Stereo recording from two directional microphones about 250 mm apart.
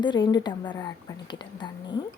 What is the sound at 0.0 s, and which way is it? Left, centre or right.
Speech, centre.